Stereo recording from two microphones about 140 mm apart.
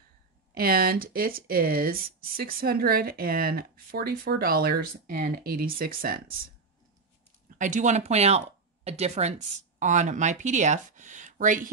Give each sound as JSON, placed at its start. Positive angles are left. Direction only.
{"t": 0.6, "sound": "speech", "side_deg": -90}
{"t": 7.5, "sound": "speech", "side_deg": -65}
{"t": 9.8, "sound": "speech", "side_deg": -60}